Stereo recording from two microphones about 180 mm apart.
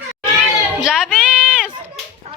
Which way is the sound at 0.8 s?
5° right (ahead or behind).